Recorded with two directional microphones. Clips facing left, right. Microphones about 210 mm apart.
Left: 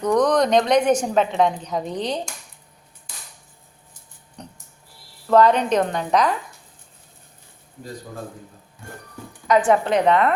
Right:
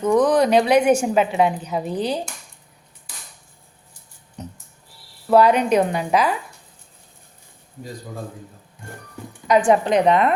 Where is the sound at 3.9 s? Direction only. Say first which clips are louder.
Right 2 dB; 5° right (ahead or behind).